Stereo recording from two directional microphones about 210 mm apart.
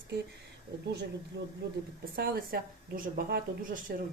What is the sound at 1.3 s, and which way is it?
Speech, 50° right (ahead or behind).